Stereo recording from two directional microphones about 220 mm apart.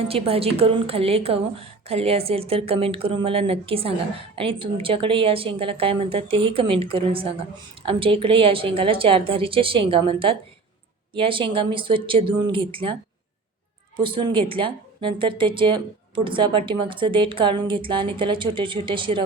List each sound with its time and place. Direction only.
0.1 s speech: 25° right (ahead or behind)